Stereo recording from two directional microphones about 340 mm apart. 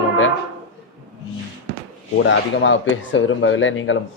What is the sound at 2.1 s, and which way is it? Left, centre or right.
Speech, left.